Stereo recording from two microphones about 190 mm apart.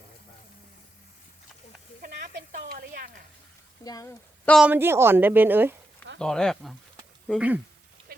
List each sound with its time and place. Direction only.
2.0 s a sound: 45° right (ahead or behind)
3.8 s speech: 20° left (ahead or behind)
4.4 s speech: centre (ahead or behind)
4.7 s a woman's voice: 10° right (ahead or behind)
6.1 s speech: 5° left (ahead or behind)